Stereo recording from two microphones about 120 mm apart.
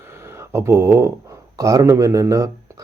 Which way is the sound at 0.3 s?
20° right (ahead or behind).